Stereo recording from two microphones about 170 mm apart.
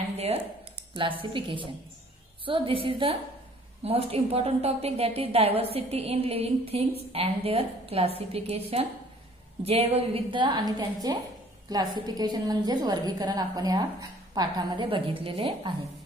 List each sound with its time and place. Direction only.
0.9 s a woman's voice: 30° right (ahead or behind)